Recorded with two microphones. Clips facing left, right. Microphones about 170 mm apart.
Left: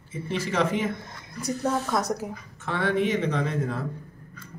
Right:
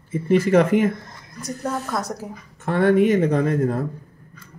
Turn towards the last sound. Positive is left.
turn(degrees=-50)  # may be behind; listen again after turning